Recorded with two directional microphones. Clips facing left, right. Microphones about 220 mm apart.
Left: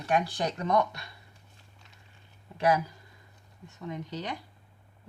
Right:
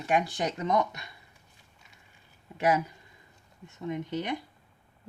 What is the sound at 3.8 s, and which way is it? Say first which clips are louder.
Speech: right 4 dB; 20° right (ahead or behind).